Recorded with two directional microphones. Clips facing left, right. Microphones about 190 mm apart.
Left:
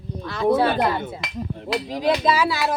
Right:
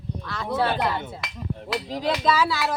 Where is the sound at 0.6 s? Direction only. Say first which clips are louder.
Left 4 dB; 45° left (ahead or behind).